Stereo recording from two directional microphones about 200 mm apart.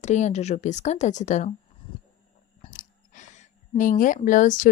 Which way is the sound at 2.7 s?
40° left (ahead or behind).